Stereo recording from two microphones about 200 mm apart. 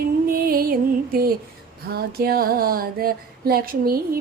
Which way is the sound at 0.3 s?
45° right (ahead or behind).